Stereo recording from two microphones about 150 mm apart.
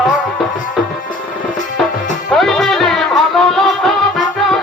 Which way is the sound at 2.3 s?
Centre (ahead or behind).